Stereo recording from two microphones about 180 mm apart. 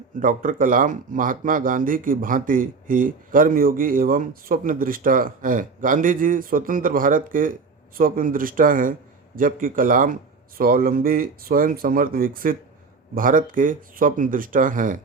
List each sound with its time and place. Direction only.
0.2 s speech: 50° right (ahead or behind)